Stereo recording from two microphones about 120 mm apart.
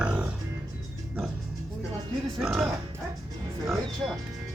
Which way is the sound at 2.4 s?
5° right (ahead or behind).